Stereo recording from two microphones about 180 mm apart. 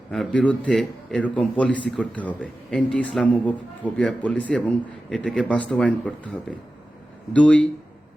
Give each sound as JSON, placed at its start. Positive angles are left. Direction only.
{"t": 0.1, "sound": "a man's voice", "side_deg": 5}